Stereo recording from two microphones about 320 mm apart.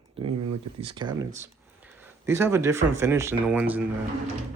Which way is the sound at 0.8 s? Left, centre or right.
Centre.